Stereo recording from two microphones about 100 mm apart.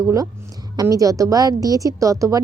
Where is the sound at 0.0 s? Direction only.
30° right (ahead or behind).